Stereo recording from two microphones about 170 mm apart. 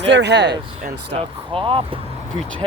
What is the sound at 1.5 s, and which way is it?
Speech, 30° right (ahead or behind).